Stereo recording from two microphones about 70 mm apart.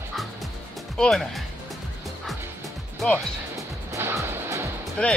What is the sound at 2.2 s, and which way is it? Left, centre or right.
Music, centre.